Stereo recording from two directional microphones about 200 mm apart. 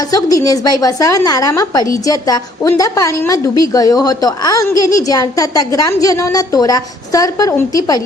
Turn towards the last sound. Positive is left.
turn(degrees=15)  # may be behind; listen again after turning